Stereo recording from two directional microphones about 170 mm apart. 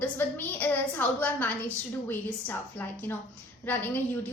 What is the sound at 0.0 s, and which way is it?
A woman's voice, 10° left (ahead or behind).